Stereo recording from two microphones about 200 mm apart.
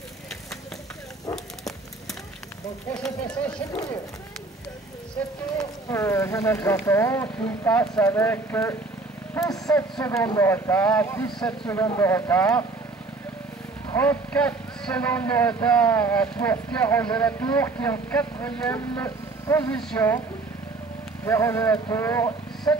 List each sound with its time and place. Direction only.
2.9 s speech: 5° left (ahead or behind)
5.6 s speech: 15° left (ahead or behind)
13.8 s speech: 10° left (ahead or behind)
21.2 s speech: 15° left (ahead or behind)